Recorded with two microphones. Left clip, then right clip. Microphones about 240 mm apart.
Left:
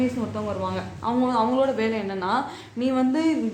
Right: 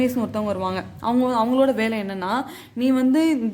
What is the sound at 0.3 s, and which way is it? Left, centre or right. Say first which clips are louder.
Speech: right 3 dB; right.